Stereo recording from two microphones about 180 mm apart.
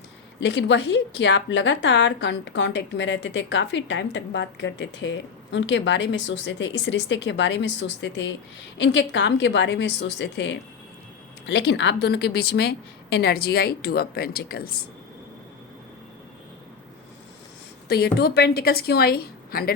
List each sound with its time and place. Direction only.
0.3 s a woman's voice: 80° left; by 14.8 s 55° left (ahead or behind)
17.8 s a woman's voice: 65° left (ahead or behind)